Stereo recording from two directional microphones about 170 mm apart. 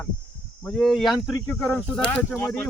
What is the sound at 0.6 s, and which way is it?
Speech, centre (ahead or behind).